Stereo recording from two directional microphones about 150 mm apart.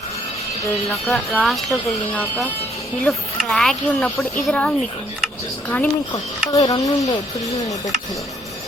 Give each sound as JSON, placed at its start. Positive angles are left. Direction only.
{"t": 1.0, "sound": "speech", "side_deg": 5}
{"t": 2.1, "sound": "speech", "side_deg": 10}
{"t": 6.1, "sound": "speech", "side_deg": 25}